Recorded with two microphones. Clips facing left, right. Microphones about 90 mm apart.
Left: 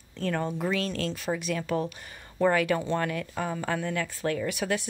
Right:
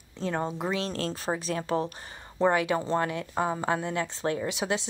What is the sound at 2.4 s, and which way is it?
Speech, 20° right (ahead or behind).